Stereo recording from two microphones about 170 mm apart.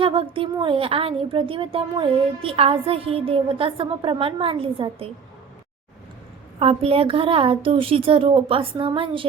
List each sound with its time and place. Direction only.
0.0 s a woman's voice: 30° right (ahead or behind)
6.6 s a woman's voice: 35° right (ahead or behind)